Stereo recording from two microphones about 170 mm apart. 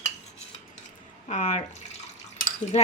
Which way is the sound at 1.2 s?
45° left (ahead or behind).